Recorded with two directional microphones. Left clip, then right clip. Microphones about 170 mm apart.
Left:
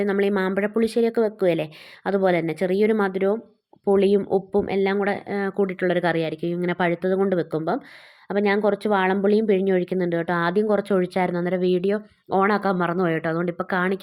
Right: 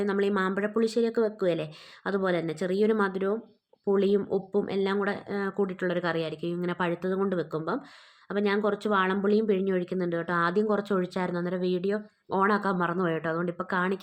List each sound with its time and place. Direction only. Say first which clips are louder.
0.0 s a woman's voice: left 5 dB; 25° left (ahead or behind)